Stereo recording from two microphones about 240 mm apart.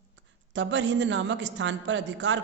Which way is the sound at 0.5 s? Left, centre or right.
Right.